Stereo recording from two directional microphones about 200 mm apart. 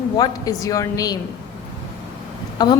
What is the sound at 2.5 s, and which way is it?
Speech, 20° left (ahead or behind).